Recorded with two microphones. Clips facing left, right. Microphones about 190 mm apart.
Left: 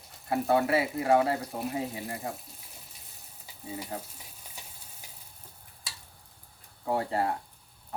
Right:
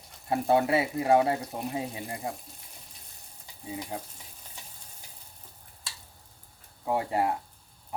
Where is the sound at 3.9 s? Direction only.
10° right (ahead or behind).